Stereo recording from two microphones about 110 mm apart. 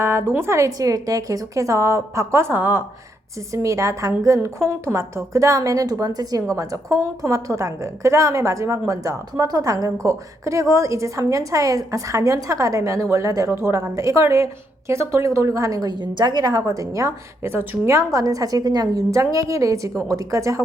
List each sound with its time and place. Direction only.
0.0 s a woman's voice: 20° right (ahead or behind)
3.5 s a woman's voice: 30° right (ahead or behind)